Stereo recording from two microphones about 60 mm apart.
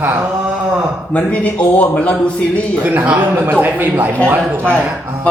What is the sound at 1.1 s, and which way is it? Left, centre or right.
A man's voice, left.